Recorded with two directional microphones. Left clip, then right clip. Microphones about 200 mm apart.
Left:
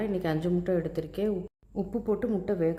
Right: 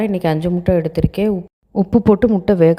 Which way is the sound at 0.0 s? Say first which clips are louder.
Right 11 dB; 35° right (ahead or behind).